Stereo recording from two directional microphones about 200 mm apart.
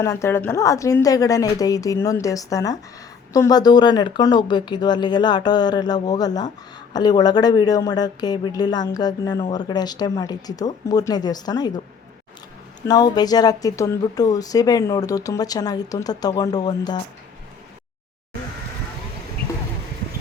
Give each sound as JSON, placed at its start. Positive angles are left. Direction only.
{"t": 0.0, "sound": "speech", "side_deg": 15}
{"t": 12.9, "sound": "speech", "side_deg": 20}